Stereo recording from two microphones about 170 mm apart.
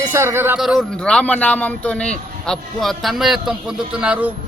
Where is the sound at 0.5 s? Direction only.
Centre (ahead or behind).